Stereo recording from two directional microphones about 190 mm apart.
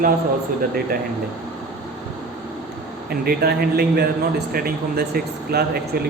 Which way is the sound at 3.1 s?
55° right (ahead or behind).